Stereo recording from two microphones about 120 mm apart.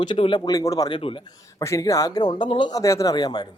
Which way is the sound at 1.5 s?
30° left (ahead or behind).